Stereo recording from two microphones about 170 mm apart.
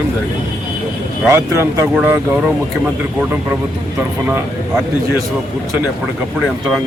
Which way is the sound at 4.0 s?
15° right (ahead or behind).